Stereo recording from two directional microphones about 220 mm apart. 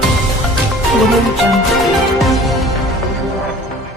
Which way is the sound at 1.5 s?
Centre (ahead or behind).